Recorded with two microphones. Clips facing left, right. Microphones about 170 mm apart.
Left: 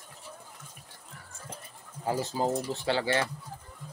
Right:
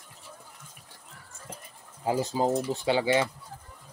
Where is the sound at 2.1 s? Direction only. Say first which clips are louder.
Right 3 dB; 15° right (ahead or behind).